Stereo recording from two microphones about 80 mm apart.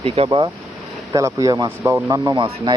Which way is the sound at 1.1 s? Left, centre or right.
Right.